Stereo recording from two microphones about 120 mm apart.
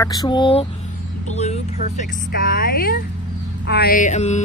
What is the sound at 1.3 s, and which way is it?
Speech, 70° left (ahead or behind).